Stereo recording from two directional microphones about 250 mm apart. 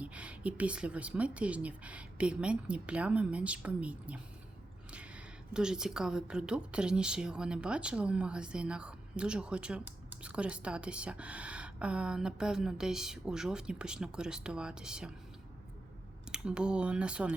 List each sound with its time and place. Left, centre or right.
0.0 s speech: centre
16.3 s speech: centre